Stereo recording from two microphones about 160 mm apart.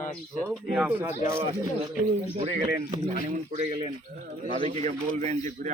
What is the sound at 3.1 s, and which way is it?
Speech, 45° right (ahead or behind).